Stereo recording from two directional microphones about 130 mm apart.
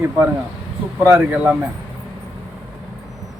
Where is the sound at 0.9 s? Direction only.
15° right (ahead or behind).